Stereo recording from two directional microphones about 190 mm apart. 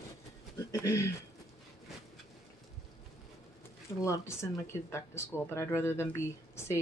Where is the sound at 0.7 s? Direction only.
15° left (ahead or behind).